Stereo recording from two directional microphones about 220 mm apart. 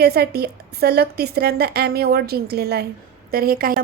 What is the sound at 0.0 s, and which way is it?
A woman's voice, 45° right (ahead or behind).